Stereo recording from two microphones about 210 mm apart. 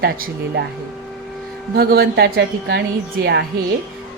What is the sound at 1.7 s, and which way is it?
A woman's voice, 50° right (ahead or behind).